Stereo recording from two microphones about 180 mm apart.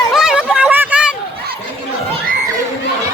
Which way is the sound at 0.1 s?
5° right (ahead or behind).